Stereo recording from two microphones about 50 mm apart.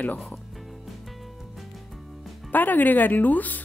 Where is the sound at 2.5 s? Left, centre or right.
Left.